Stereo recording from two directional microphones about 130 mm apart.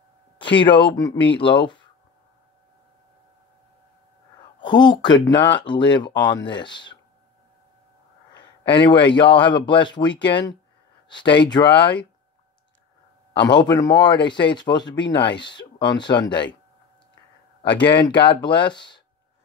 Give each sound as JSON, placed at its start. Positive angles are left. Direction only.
{"t": 0.4, "sound": "speech", "side_deg": 40}
{"t": 4.6, "sound": "speech", "side_deg": 35}
{"t": 8.4, "sound": "speech", "side_deg": 40}
{"t": 13.4, "sound": "speech", "side_deg": 35}
{"t": 18.0, "sound": "speech", "side_deg": 35}